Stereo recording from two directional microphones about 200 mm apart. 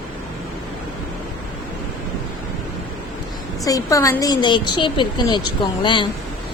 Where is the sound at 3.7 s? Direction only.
15° left (ahead or behind).